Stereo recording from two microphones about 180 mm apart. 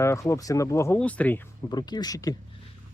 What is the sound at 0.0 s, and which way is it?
Speech, 15° left (ahead or behind).